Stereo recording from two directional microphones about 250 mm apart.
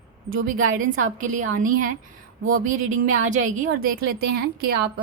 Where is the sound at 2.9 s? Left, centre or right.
Right.